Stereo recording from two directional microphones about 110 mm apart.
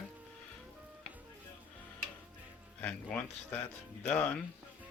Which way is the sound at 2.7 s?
15° left (ahead or behind).